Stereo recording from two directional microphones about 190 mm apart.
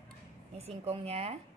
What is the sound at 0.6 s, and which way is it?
Speech, 30° right (ahead or behind).